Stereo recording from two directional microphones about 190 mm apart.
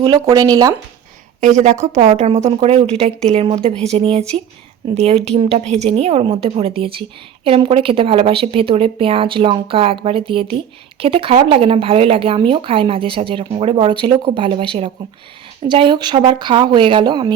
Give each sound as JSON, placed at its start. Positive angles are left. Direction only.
{"t": 0.0, "sound": "speech", "side_deg": -20}
{"t": 1.4, "sound": "a woman's voice", "side_deg": -40}